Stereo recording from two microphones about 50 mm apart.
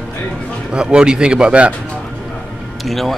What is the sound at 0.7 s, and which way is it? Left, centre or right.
Speech, centre.